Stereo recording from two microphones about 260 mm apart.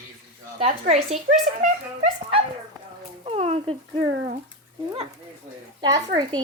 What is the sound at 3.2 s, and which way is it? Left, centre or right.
Speech, right.